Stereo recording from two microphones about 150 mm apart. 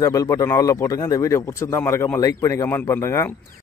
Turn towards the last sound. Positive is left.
turn(degrees=20)  # may be behind; listen again after turning